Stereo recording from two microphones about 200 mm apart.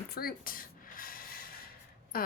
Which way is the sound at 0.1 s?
50° left (ahead or behind).